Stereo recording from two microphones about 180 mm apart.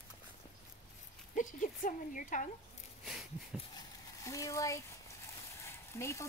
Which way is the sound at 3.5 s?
Centre (ahead or behind).